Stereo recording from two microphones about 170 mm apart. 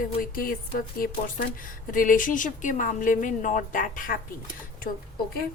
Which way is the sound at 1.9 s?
50° left (ahead or behind).